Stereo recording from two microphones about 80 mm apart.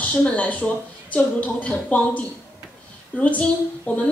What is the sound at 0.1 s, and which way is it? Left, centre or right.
A woman's voice, centre.